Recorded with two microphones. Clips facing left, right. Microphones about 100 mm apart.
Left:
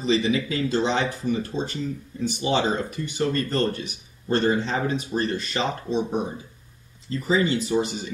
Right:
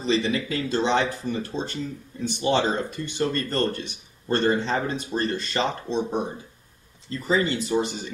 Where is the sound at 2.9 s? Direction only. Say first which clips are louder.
Left 1 dB; 10° left (ahead or behind).